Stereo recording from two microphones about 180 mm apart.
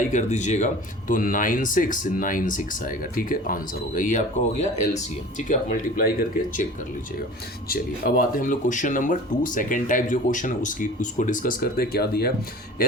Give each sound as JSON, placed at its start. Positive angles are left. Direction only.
{"t": 0.1, "sound": "speech", "side_deg": 40}
{"t": 7.7, "sound": "speech", "side_deg": 55}